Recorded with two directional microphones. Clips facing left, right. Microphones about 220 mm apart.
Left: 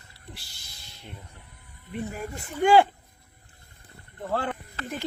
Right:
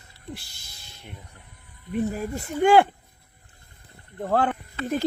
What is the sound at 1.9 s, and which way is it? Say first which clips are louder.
Speech: right 7 dB; 40° right (ahead or behind).